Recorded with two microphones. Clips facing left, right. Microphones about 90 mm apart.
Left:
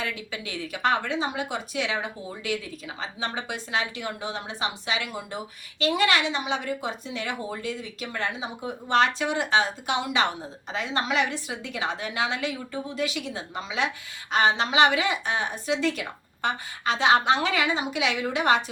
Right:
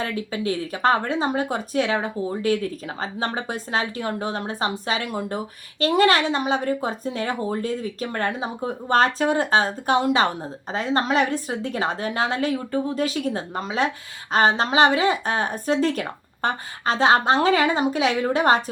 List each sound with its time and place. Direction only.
0.0 s speech: 40° right (ahead or behind)